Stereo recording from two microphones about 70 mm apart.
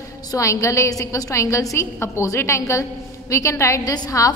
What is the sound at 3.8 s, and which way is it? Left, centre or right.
Speech, left.